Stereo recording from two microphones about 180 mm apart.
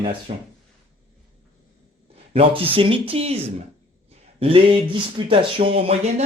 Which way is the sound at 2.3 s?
30° right (ahead or behind).